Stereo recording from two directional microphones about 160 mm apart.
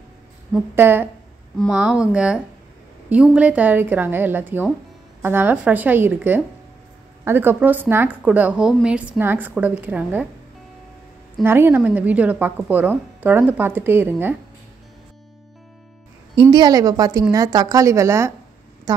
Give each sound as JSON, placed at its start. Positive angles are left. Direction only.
{"t": 0.7, "sound": "a woman's voice", "side_deg": -15}
{"t": 11.4, "sound": "a woman's voice", "side_deg": -15}
{"t": 16.3, "sound": "a woman's voice", "side_deg": -30}